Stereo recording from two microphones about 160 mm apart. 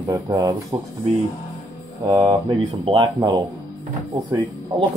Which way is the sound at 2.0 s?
25° right (ahead or behind).